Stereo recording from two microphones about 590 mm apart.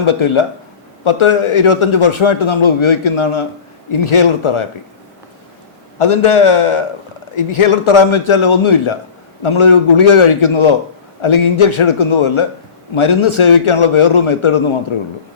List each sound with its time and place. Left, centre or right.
0.0 s a man's voice: left
6.0 s a man's voice: left